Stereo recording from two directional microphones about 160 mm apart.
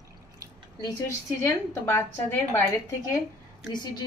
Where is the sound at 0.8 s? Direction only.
15° left (ahead or behind).